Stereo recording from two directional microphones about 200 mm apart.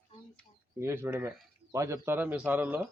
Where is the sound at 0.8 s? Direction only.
10° right (ahead or behind).